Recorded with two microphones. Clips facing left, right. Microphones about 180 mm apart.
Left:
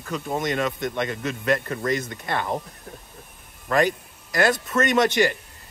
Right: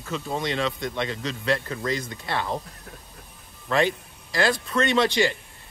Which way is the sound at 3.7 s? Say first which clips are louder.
Left 2 dB; 45° left (ahead or behind).